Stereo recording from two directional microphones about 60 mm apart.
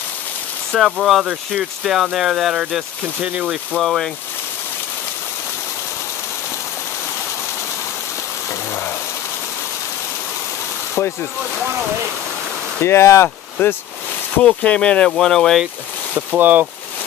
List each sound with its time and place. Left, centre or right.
0.7 s speech: centre
3.2 s speech: right
3.8 s speech: centre
12.8 s speech: left
13.6 s speech: left
14.3 s speech: left
15.0 s speech: centre
16.2 s speech: right